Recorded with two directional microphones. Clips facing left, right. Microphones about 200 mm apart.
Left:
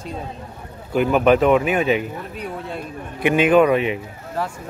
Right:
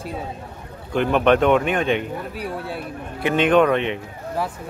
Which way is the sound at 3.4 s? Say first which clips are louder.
Left 1 dB; 5° left (ahead or behind).